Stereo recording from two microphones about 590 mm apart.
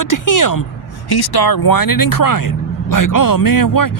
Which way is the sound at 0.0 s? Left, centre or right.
Left.